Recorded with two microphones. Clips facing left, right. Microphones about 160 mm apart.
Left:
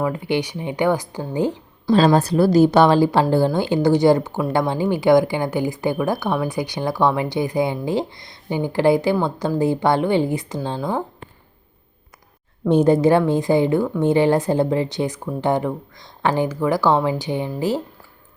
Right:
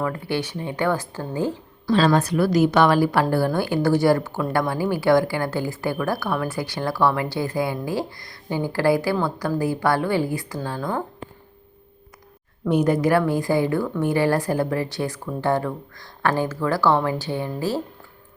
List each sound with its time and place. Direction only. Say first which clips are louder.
0.0 s speech: left 4 dB; 15° left (ahead or behind)
2.1 s a woman's voice: left 4 dB; 30° left (ahead or behind)
12.6 s a woman's voice: left 5 dB; 25° left (ahead or behind)